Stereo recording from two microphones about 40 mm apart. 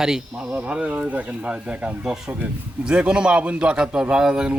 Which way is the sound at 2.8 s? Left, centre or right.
Right.